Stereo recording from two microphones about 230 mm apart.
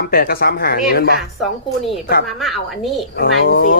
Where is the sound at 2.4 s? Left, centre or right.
Centre.